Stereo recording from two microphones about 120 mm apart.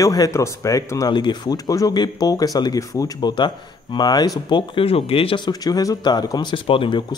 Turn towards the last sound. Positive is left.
turn(degrees=45)  # may be behind; listen again after turning